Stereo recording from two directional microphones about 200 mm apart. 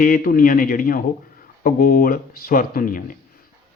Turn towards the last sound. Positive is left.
turn(degrees=45)  # may be behind; listen again after turning